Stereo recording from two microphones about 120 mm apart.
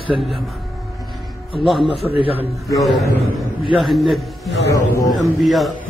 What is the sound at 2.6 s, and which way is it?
A man's voice, centre (ahead or behind).